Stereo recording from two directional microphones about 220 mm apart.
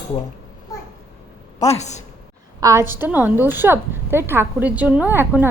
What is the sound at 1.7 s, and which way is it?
Speech, 30° left (ahead or behind).